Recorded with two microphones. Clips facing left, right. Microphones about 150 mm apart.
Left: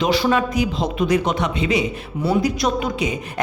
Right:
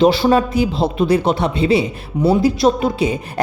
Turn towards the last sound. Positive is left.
turn(degrees=-30)  # may be behind; listen again after turning